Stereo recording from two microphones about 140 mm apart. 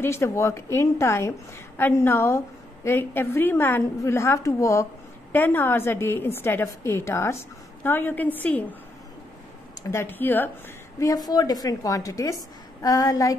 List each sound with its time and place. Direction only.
0.0 s a woman's voice: 20° left (ahead or behind)
9.8 s a woman's voice: 20° left (ahead or behind)
11.2 s a woman's voice: 30° left (ahead or behind)